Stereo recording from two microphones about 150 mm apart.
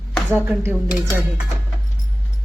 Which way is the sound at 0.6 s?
15° right (ahead or behind).